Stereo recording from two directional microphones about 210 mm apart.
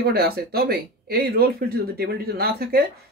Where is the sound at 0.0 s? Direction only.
45° right (ahead or behind).